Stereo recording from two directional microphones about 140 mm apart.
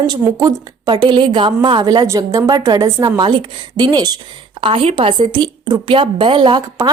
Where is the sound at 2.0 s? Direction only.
20° right (ahead or behind).